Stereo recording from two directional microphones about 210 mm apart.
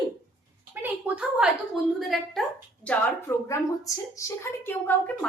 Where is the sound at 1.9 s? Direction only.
Centre (ahead or behind).